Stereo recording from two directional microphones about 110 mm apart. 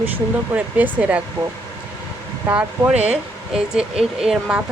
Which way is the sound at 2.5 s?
15° right (ahead or behind).